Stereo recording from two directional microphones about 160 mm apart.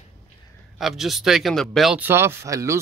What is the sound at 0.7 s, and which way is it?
Speech, centre (ahead or behind).